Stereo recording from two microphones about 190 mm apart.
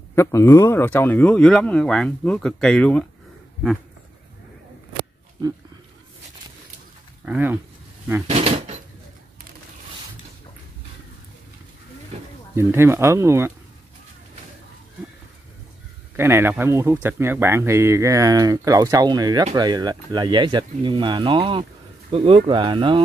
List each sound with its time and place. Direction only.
0.1 s speech: 15° left (ahead or behind)
7.2 s speech: 10° right (ahead or behind)
8.3 s speech: 35° right (ahead or behind)
12.5 s speech: 15° right (ahead or behind)
16.2 s speech: 15° right (ahead or behind)